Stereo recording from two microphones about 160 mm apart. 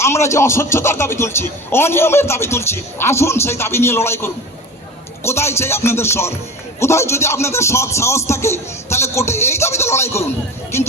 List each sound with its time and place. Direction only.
0.0 s speech: 15° left (ahead or behind)